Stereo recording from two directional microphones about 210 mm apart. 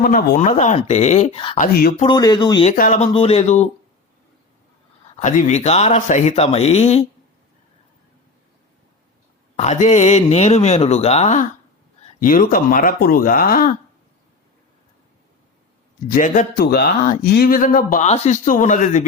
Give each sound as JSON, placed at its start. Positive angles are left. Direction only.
{"t": 0.0, "sound": "speech", "side_deg": 45}
{"t": 1.5, "sound": "speech", "side_deg": 40}
{"t": 2.0, "sound": "speech", "side_deg": 20}
{"t": 2.6, "sound": "speech", "side_deg": 35}
{"t": 5.2, "sound": "speech", "side_deg": 35}
{"t": 9.6, "sound": "speech", "side_deg": 35}
{"t": 16.1, "sound": "speech", "side_deg": 40}